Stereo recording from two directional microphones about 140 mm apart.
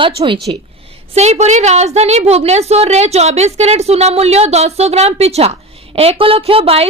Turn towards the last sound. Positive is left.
turn(degrees=-45)  # may be behind; listen again after turning